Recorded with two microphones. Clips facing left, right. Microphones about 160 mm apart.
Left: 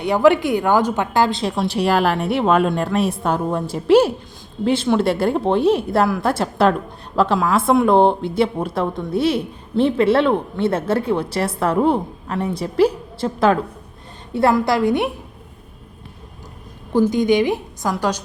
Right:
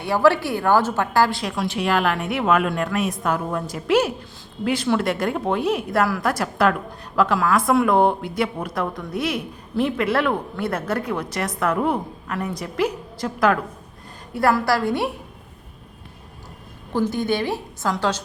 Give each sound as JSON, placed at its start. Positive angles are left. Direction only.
{"t": 0.0, "sound": "a woman's voice", "side_deg": 20}
{"t": 16.9, "sound": "a woman's voice", "side_deg": 15}